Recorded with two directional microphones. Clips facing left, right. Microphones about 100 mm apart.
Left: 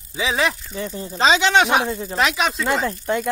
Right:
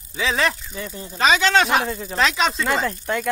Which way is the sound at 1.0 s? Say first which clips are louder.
Left 1 dB; 25° left (ahead or behind).